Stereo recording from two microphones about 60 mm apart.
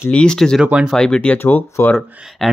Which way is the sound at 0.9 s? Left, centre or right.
Centre.